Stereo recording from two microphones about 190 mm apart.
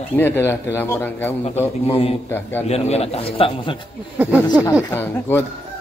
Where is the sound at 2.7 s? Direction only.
35° left (ahead or behind).